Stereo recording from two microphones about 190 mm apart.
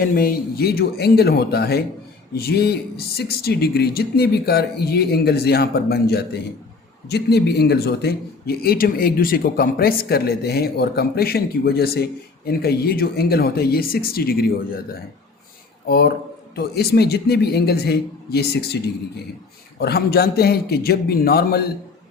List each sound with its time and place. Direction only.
0.0 s a man's voice: 50° left (ahead or behind)
15.9 s a man's voice: 55° left (ahead or behind)
19.8 s a man's voice: 55° left (ahead or behind)